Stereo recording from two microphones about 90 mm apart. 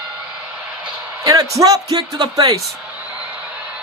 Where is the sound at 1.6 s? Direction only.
40° right (ahead or behind).